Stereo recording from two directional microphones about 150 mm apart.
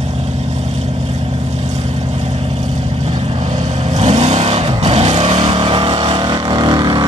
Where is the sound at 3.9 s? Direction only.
50° right (ahead or behind).